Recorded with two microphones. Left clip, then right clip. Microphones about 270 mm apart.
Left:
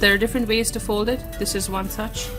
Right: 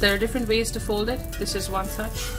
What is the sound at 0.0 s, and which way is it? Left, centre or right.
Speech, left.